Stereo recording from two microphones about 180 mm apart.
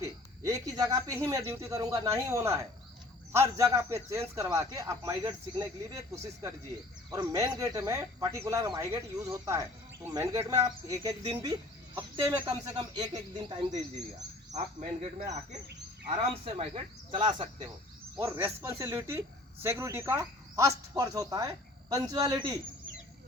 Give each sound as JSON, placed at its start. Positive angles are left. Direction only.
{"t": 0.4, "sound": "speech", "side_deg": -20}
{"t": 7.1, "sound": "speech", "side_deg": -20}
{"t": 13.7, "sound": "speech", "side_deg": -40}
{"t": 16.4, "sound": "speech", "side_deg": -35}
{"t": 18.2, "sound": "speech", "side_deg": -15}